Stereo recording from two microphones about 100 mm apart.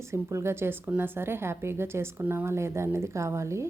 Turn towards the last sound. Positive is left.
turn(degrees=-30)  # may be behind; listen again after turning